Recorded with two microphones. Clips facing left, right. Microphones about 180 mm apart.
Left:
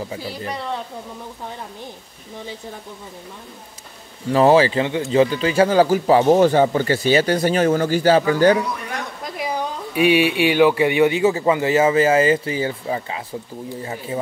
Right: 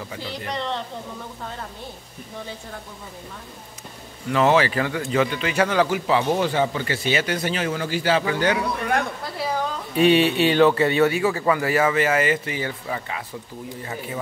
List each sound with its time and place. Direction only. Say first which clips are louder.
0.5 s a woman's voice: even; 10° left (ahead or behind)
4.3 s speech: left 5 dB; 35° left (ahead or behind)
9.2 s speech: left 1 dB; 15° left (ahead or behind)